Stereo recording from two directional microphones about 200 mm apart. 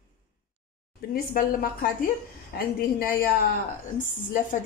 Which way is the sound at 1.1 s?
45° left (ahead or behind).